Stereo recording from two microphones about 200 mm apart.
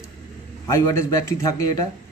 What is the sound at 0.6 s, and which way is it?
Speech, 15° left (ahead or behind).